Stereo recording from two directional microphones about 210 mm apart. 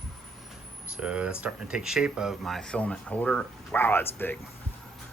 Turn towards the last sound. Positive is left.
turn(degrees=10)  # may be behind; listen again after turning